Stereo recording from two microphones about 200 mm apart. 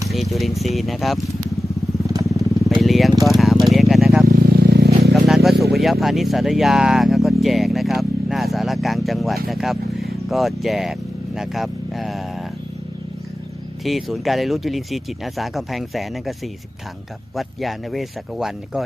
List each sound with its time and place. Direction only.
0.1 s speech: centre (ahead or behind)
2.0 s vehicle: 15° right (ahead or behind)
2.8 s vehicle: centre (ahead or behind)
3.2 s a sound: centre (ahead or behind)
4.3 s vehicle: 50° right (ahead or behind)
5.1 s a sound: centre (ahead or behind)
5.7 s speech: centre (ahead or behind)
13.8 s speech: centre (ahead or behind)
17.3 s speech: centre (ahead or behind)